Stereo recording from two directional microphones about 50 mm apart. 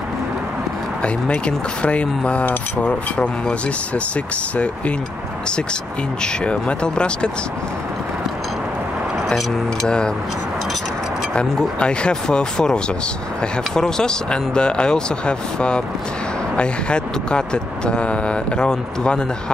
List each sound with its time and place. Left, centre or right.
1.0 s speech: left
6.2 s speech: left
9.8 s speech: centre
11.3 s speech: centre